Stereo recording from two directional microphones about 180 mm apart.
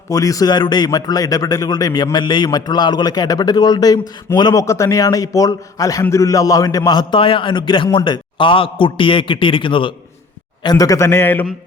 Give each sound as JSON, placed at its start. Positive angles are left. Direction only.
{"t": 0.1, "sound": "a man's voice", "side_deg": 20}